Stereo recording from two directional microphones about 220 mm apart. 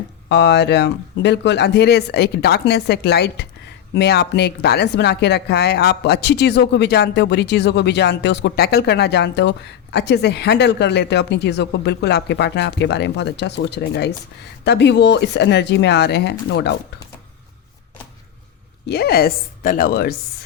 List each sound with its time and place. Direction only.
0.3 s a woman's voice: 50° left (ahead or behind)
18.9 s a woman's voice: 45° left (ahead or behind)